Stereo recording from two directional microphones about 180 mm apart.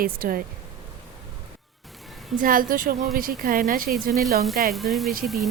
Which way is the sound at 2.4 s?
50° right (ahead or behind).